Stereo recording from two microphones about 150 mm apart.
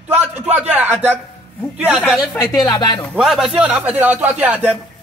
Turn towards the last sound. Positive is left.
turn(degrees=-10)  # may be behind; listen again after turning